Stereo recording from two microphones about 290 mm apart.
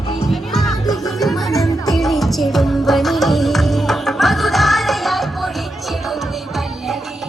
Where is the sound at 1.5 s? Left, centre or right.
Centre.